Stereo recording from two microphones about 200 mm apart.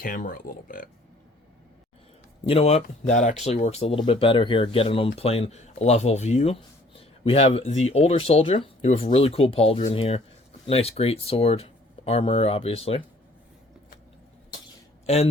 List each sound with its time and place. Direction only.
0.0 s speech: 45° left (ahead or behind)
2.5 s speech: 30° left (ahead or behind)
15.0 s speech: 30° left (ahead or behind)